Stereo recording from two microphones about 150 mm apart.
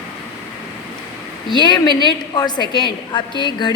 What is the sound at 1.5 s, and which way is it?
A woman's voice, 30° left (ahead or behind).